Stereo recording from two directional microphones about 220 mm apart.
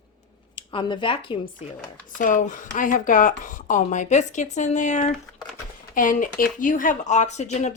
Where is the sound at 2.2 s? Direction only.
35° left (ahead or behind).